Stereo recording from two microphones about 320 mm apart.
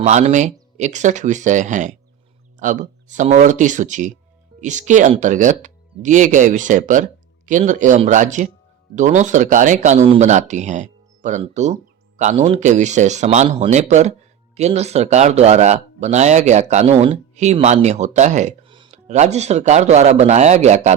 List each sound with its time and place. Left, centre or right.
0.0 s speech: right